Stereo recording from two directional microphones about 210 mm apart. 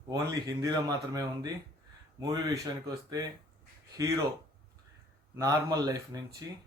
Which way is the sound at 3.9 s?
15° right (ahead or behind).